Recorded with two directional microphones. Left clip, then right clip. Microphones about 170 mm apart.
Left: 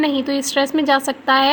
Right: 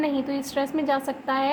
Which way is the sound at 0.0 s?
30° left (ahead or behind).